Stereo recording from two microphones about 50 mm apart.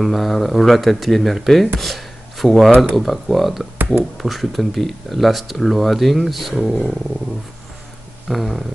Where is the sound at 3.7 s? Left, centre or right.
Right.